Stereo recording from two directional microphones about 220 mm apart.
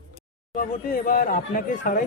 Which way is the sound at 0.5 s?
35° left (ahead or behind).